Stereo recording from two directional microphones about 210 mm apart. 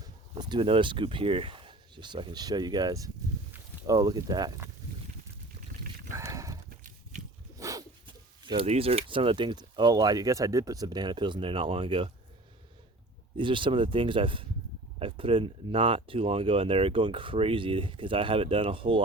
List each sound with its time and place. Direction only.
0.0 s speech: 20° right (ahead or behind)
6.1 s dog: 15° right (ahead or behind)
7.6 s speech: 15° right (ahead or behind)
13.3 s speech: 25° right (ahead or behind)